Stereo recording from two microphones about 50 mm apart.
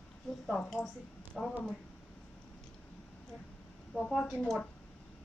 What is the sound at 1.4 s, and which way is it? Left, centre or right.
Speech, centre.